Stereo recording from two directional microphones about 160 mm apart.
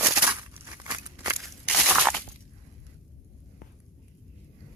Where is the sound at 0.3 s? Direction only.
15° right (ahead or behind).